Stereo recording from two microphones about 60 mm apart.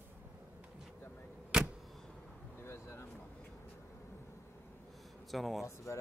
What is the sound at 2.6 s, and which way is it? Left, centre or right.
Speech, left.